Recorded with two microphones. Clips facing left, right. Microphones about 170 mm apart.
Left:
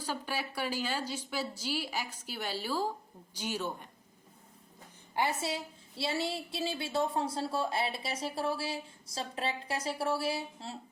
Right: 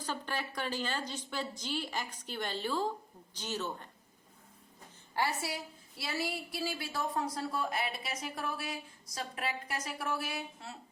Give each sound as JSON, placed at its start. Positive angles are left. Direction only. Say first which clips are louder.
{"t": 0.0, "sound": "a woman's voice", "louder": "left 1 dB", "side_deg": 10}
{"t": 5.1, "sound": "a woman's voice", "louder": "left 2 dB", "side_deg": 20}